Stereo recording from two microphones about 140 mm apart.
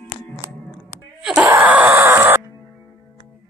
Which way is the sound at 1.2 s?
5° right (ahead or behind).